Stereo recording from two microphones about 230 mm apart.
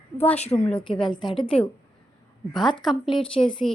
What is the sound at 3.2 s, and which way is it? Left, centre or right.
Speech, left.